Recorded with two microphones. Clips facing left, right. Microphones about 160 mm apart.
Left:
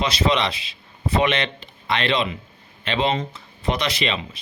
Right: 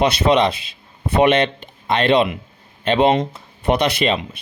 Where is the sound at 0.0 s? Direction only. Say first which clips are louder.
Right 6 dB; 55° right (ahead or behind).